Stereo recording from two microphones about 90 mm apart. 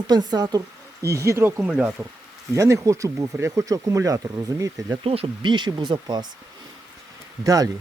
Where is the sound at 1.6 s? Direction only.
15° right (ahead or behind).